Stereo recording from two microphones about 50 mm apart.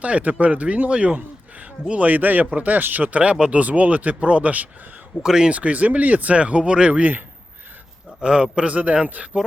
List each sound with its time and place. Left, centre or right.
0.0 s speech: right
5.2 s speech: centre
5.5 s speech: right
8.2 s speech: centre